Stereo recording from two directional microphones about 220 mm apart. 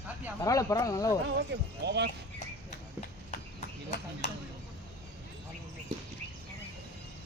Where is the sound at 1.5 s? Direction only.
50° right (ahead or behind).